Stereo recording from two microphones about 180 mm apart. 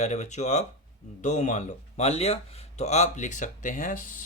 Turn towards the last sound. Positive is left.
turn(degrees=45)  # may be behind; listen again after turning